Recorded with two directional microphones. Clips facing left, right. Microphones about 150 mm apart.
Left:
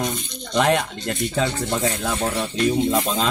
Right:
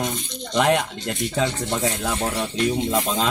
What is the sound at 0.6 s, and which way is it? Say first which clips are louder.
Speech: even; 10° right (ahead or behind).